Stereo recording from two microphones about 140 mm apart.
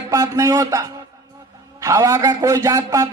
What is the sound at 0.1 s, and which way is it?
A man's voice, 25° right (ahead or behind).